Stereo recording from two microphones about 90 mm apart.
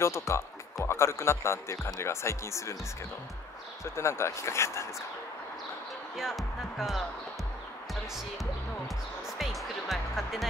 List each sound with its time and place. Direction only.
0.0 s speech: 30° left (ahead or behind)
3.8 s speech: 30° left (ahead or behind)
6.1 s speech: 5° right (ahead or behind)
9.4 s music: centre (ahead or behind)